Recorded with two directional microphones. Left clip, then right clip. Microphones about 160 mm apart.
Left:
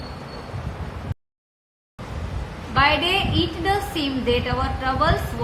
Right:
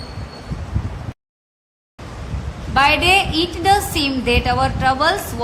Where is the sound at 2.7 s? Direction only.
65° right (ahead or behind).